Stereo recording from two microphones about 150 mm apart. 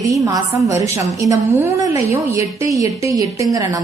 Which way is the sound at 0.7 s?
20° right (ahead or behind).